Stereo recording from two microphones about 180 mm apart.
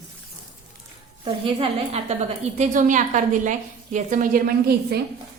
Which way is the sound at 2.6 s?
45° right (ahead or behind).